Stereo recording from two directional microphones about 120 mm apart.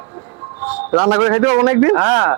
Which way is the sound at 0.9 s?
20° right (ahead or behind).